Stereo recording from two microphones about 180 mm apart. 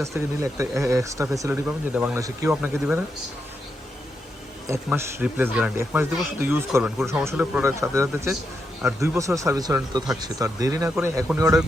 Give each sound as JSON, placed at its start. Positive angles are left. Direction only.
{"t": 0.0, "sound": "speech", "side_deg": -15}
{"t": 4.6, "sound": "speech", "side_deg": -15}